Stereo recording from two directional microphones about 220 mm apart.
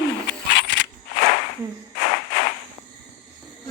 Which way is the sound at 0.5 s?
50° left (ahead or behind).